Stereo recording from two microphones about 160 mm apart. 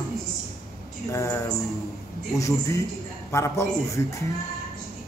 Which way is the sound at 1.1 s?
20° left (ahead or behind).